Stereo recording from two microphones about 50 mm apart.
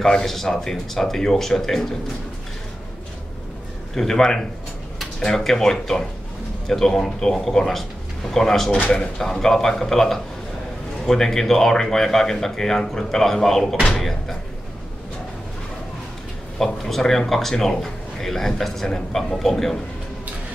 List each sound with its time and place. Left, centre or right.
0.0 s speech: centre
3.9 s speech: centre
13.7 s speech: centre
16.5 s a man's voice: centre